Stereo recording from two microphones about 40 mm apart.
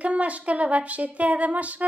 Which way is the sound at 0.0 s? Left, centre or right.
Right.